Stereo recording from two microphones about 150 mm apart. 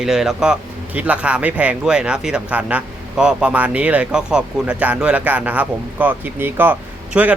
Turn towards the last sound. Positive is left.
turn(degrees=-10)  # may be behind; listen again after turning